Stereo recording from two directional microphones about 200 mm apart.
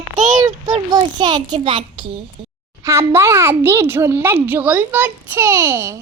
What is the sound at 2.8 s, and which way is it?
A child's voice, 15° right (ahead or behind).